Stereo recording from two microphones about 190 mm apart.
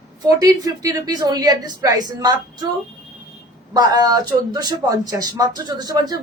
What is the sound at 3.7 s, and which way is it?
Speech, 20° right (ahead or behind).